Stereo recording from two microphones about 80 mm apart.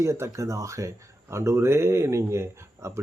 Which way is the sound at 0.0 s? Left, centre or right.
Right.